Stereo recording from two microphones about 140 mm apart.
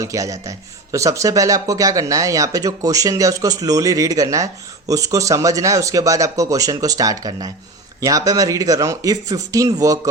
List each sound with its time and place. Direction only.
0.0 s speech: 25° right (ahead or behind)